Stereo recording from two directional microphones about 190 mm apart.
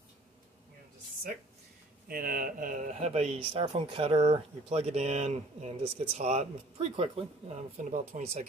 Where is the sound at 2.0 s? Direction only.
50° right (ahead or behind).